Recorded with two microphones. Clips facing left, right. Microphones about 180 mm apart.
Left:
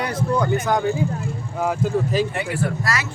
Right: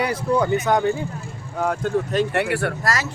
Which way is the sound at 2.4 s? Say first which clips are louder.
Right 3 dB; 70° right (ahead or behind).